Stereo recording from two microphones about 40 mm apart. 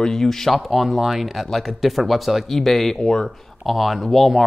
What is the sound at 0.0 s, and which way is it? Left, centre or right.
Speech, centre.